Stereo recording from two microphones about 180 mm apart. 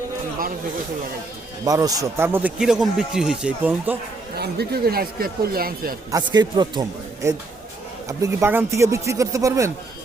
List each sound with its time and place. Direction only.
1.6 s a man's voice: 20° right (ahead or behind)
4.4 s speech: 60° right (ahead or behind)
6.1 s a man's voice: 20° right (ahead or behind)